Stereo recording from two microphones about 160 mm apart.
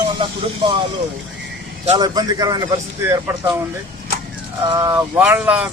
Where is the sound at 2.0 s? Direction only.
25° right (ahead or behind).